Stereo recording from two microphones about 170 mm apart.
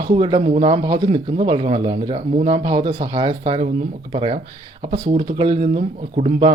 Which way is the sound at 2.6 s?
30° right (ahead or behind).